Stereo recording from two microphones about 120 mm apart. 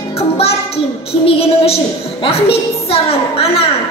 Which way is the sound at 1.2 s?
50° left (ahead or behind).